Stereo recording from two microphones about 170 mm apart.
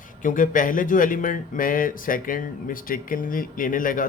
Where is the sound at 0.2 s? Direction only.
50° left (ahead or behind).